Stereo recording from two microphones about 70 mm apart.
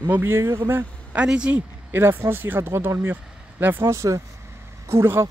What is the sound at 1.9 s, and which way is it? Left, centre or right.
Speech, right.